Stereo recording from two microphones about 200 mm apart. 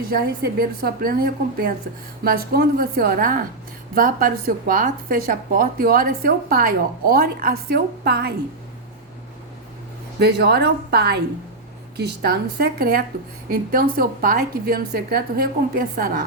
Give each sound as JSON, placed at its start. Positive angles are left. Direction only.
{"t": 0.1, "sound": "a woman's voice", "side_deg": -45}
{"t": 10.2, "sound": "a woman's voice", "side_deg": -55}